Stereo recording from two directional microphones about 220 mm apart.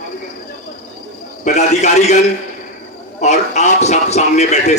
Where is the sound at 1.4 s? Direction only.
30° left (ahead or behind).